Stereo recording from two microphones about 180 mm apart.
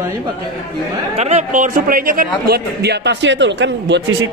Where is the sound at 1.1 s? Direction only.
35° right (ahead or behind).